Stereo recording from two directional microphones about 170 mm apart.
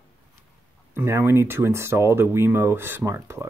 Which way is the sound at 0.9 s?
15° right (ahead or behind).